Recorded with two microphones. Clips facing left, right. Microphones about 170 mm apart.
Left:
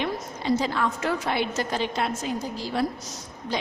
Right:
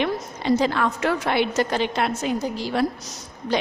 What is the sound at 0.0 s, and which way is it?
A woman's voice, 70° right (ahead or behind).